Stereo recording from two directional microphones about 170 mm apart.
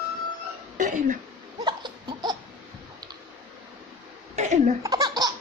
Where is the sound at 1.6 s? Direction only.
25° right (ahead or behind).